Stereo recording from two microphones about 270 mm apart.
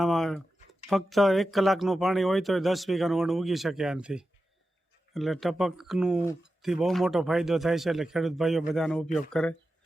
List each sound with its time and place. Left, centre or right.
0.0 s speech: centre